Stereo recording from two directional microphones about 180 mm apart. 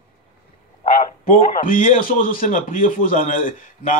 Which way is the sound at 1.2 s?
50° left (ahead or behind).